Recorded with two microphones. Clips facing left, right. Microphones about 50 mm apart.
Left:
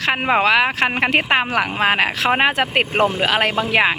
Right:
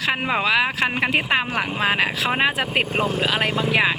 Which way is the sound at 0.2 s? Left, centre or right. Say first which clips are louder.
Left 5 dB; left.